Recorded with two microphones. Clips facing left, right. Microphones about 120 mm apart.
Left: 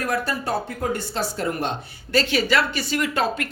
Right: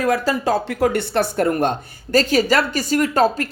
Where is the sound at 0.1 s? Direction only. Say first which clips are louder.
Right 5 dB; 90° right.